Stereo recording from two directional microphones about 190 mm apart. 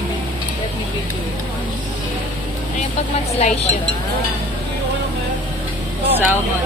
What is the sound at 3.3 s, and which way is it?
Speech, 35° left (ahead or behind).